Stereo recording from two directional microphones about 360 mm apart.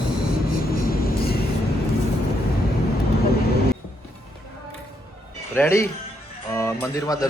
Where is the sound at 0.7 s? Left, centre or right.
Left.